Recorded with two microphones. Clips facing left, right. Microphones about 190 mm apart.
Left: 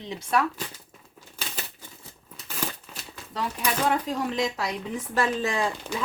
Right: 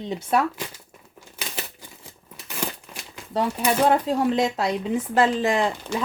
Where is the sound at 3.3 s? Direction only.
25° right (ahead or behind).